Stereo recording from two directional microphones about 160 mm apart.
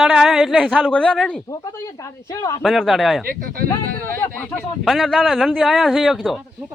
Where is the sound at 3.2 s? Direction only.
65° right (ahead or behind).